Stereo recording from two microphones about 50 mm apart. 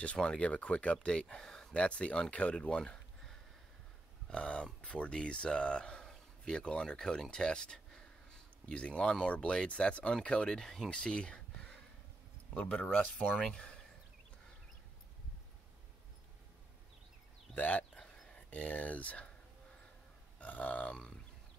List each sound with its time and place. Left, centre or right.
0.0 s speech: left
1.2 s speech: centre
1.7 s speech: left
2.8 s a sound: centre
4.3 s speech: centre
10.5 s speech: centre
10.9 s a sound: centre
12.5 s speech: left
17.6 s speech: left
17.9 s a sound: centre
18.3 s speech: left
20.3 s burping: left